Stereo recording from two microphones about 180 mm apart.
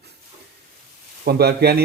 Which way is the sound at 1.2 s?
60° right (ahead or behind).